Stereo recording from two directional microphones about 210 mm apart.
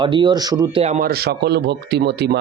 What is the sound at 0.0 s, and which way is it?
Speech, 20° right (ahead or behind).